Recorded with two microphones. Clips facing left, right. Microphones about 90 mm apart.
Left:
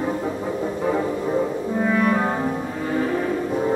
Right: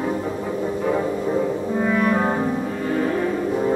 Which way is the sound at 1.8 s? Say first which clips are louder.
Even; centre (ahead or behind).